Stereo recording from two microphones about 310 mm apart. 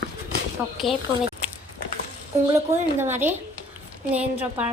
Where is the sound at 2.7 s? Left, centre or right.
Centre.